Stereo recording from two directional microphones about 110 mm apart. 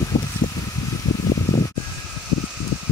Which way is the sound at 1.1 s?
40° left (ahead or behind).